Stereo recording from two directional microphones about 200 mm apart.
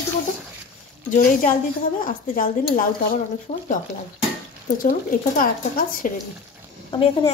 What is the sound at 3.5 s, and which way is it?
Speech, 30° left (ahead or behind).